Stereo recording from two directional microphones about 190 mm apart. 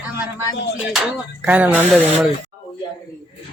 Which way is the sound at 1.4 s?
10° right (ahead or behind).